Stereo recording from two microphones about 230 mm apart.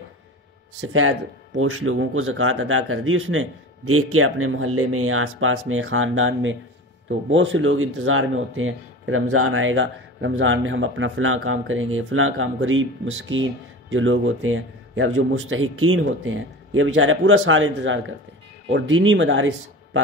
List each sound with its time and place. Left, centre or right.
0.7 s speech: right